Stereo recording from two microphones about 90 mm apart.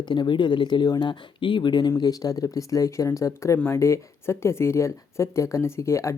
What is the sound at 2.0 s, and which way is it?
A woman's voice, 45° left (ahead or behind).